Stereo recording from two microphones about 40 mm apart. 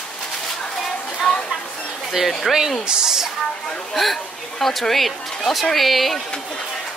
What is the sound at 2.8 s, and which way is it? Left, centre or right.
Speech, centre.